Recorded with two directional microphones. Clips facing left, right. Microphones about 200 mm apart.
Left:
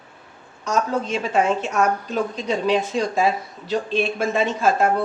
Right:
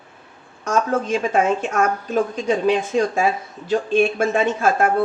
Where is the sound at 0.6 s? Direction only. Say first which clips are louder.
Right 2 dB; 50° right (ahead or behind).